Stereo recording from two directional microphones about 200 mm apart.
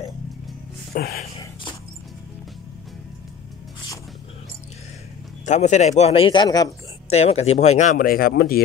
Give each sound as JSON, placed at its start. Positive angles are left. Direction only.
{"t": 0.9, "sound": "speech", "side_deg": 50}
{"t": 5.4, "sound": "speech", "side_deg": 35}
{"t": 7.1, "sound": "speech", "side_deg": 30}